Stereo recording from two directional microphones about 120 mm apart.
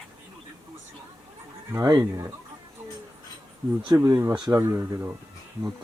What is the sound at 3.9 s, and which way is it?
Speech, 20° right (ahead or behind).